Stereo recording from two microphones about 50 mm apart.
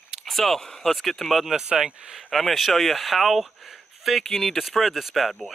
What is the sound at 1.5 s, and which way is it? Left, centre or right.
Speech, centre.